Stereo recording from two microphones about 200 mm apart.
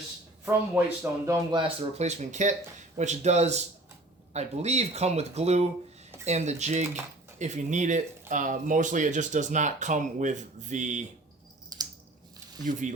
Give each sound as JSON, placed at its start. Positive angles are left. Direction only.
{"t": 0.8, "sound": "speech", "side_deg": -10}
{"t": 1.3, "sound": "speech", "side_deg": -25}
{"t": 11.7, "sound": "scissors", "side_deg": -20}
{"t": 12.7, "sound": "speech", "side_deg": -40}